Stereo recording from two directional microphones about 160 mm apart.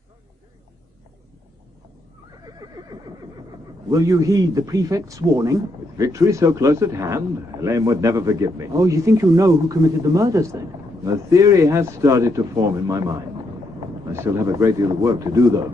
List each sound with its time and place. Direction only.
3.8 s speech: 20° right (ahead or behind)